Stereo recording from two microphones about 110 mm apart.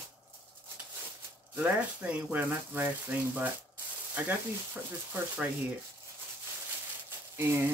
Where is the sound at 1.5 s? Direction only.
15° right (ahead or behind).